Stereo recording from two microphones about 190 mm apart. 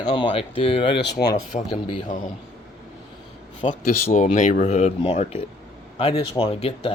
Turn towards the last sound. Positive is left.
turn(degrees=30)  # may be behind; listen again after turning